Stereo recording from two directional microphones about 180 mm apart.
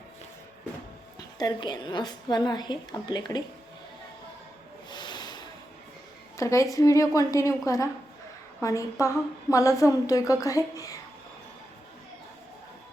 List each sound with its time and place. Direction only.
1.4 s a woman's voice: 20° left (ahead or behind)
4.9 s vehicle: 25° left (ahead or behind)
6.3 s a woman's voice: 15° left (ahead or behind)